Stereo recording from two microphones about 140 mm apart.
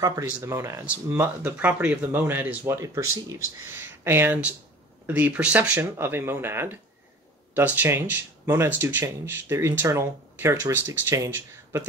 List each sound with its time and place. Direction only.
0.0 s speech: 25° right (ahead or behind)